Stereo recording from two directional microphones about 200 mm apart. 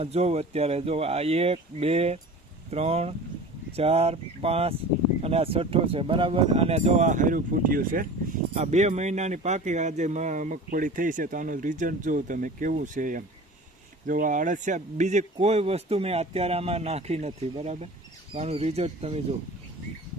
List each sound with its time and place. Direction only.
0.0 s speech: 30° right (ahead or behind)
8.5 s speech: 35° right (ahead or behind)